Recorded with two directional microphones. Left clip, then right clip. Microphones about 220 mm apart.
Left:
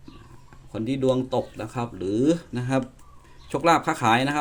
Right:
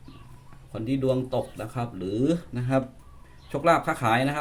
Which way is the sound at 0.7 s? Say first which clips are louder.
Left 2 dB; 30° left (ahead or behind).